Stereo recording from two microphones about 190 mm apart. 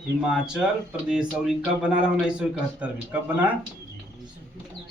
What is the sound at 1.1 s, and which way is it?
A man's voice, 5° right (ahead or behind).